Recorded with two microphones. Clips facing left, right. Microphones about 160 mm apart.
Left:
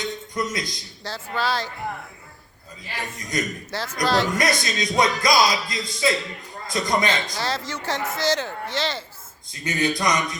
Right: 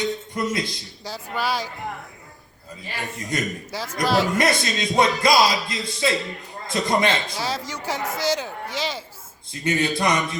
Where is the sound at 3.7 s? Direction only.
10° right (ahead or behind).